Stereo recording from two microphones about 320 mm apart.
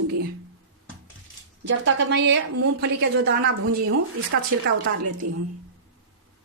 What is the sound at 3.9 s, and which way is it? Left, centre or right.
Speech, right.